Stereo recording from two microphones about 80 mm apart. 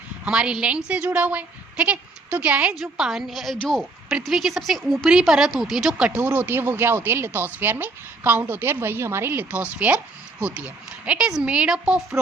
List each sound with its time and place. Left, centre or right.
0.3 s a woman's voice: centre
2.8 s a woman's voice: centre
6.1 s a woman's voice: right